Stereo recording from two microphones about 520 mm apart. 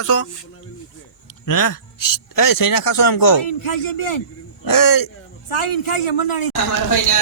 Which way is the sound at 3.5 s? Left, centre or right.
Left.